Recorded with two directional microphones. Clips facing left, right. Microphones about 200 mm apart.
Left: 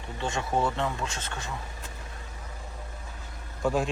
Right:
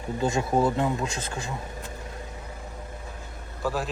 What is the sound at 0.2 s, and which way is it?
Speech, 35° right (ahead or behind).